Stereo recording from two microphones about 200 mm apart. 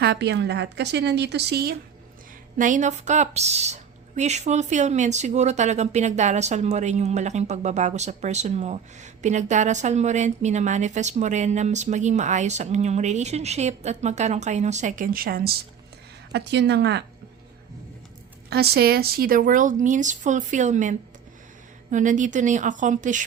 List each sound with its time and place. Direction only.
0.0 s a woman's voice: 55° right (ahead or behind)
2.6 s a woman's voice: 40° right (ahead or behind)
16.3 s a woman's voice: 60° right (ahead or behind)
18.5 s a woman's voice: 50° right (ahead or behind)